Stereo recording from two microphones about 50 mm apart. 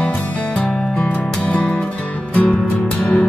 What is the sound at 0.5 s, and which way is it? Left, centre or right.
Music, left.